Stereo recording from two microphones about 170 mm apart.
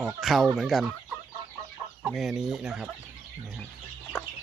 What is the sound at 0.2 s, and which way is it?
Speech, centre (ahead or behind).